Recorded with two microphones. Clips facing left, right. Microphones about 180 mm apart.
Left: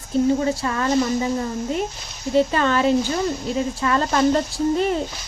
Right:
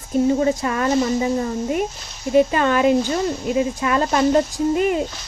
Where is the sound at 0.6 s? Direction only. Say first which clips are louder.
Right 1 dB; 25° right (ahead or behind).